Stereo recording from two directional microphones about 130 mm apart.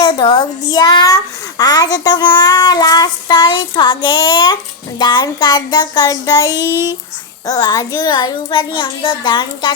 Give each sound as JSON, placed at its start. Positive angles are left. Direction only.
{"t": 0.0, "sound": "a child's voice", "side_deg": 35}